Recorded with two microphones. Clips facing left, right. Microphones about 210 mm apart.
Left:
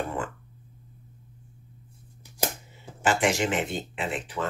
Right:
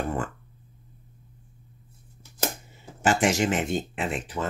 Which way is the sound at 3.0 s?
45° right (ahead or behind).